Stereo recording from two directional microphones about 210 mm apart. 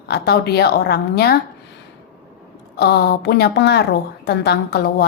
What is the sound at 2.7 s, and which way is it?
A woman's voice, 50° left (ahead or behind).